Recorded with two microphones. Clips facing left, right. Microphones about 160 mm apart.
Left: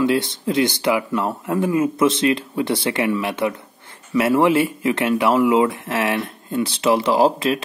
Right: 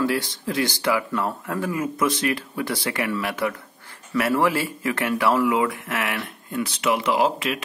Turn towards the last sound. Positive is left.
turn(degrees=35)  # may be behind; listen again after turning